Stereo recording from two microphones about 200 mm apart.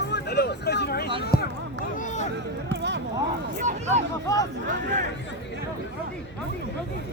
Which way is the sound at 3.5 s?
35° right (ahead or behind).